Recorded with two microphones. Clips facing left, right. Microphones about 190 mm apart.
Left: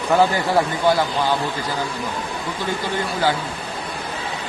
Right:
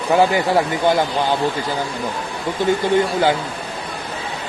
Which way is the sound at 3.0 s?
25° right (ahead or behind).